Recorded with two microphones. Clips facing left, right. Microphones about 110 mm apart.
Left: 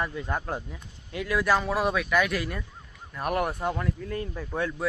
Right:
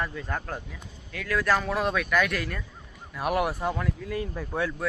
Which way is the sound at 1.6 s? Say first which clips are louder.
Left 1 dB; 5° left (ahead or behind).